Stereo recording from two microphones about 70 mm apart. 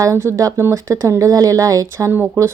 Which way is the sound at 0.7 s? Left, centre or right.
Right.